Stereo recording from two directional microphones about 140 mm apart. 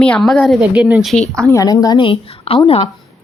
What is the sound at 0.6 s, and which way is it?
Speech, 10° right (ahead or behind).